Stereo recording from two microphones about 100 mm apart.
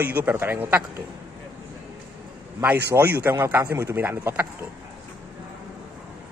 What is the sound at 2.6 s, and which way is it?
A man's voice, 20° right (ahead or behind).